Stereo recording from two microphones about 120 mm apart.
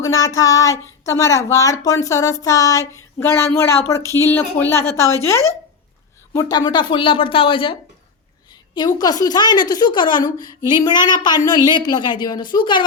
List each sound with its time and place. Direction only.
0.0 s speech: 30° left (ahead or behind); by 7.8 s 45° left (ahead or behind)
9.0 s a woman's voice: 30° left (ahead or behind)